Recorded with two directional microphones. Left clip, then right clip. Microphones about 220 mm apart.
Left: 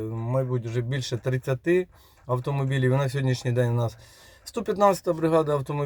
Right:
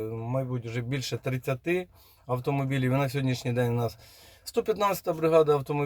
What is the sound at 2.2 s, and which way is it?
Speech, 15° left (ahead or behind).